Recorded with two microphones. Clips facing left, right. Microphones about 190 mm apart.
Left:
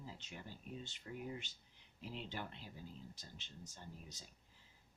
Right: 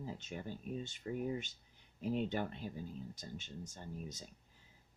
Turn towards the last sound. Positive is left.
turn(degrees=-45)  # may be behind; listen again after turning